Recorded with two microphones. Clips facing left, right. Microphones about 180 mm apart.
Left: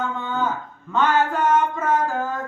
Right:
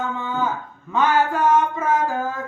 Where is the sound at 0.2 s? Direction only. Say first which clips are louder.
Even; 10° right (ahead or behind).